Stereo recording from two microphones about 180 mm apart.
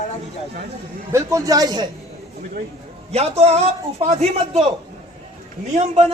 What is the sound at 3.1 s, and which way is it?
A man's voice, 35° right (ahead or behind).